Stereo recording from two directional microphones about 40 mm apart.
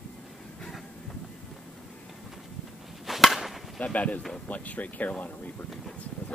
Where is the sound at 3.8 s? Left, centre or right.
Left.